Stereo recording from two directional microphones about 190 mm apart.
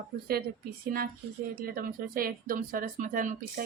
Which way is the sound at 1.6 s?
50° right (ahead or behind).